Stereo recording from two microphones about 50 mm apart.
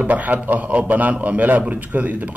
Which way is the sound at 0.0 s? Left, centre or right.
Right.